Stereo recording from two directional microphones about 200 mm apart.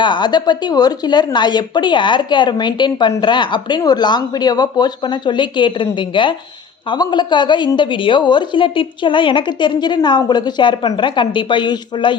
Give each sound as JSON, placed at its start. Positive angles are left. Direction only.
{"t": 0.0, "sound": "speech", "side_deg": 20}